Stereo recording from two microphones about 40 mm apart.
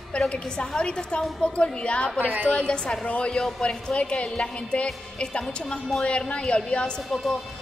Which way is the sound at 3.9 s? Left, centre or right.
Left.